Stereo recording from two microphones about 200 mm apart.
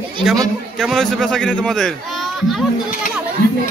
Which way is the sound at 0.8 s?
Centre (ahead or behind).